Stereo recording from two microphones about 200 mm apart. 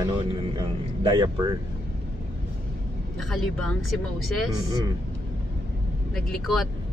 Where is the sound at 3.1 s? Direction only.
Centre (ahead or behind).